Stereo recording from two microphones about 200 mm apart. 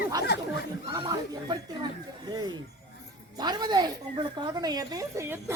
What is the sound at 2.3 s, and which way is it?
A woman's voice, 20° right (ahead or behind).